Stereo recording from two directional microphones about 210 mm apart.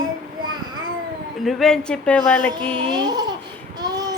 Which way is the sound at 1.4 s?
Centre (ahead or behind).